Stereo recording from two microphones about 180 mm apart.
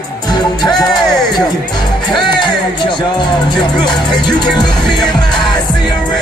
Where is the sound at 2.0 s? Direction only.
25° left (ahead or behind).